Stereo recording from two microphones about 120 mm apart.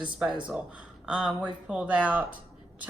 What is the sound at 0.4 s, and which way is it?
A woman's voice, 10° right (ahead or behind).